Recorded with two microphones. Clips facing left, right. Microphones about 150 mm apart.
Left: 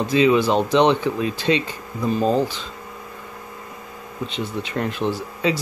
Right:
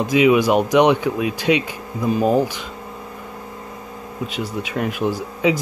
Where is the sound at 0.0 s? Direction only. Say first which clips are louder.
Right 2 dB; 15° right (ahead or behind).